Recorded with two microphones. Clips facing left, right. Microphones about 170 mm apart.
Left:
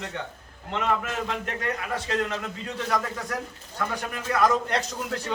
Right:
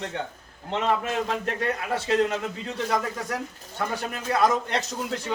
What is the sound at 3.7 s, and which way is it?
A man's voice, 25° right (ahead or behind).